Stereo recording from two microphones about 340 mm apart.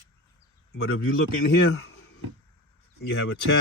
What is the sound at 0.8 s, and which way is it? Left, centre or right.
Speech, left.